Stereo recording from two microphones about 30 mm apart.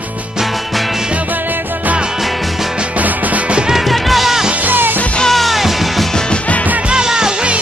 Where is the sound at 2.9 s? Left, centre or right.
Right.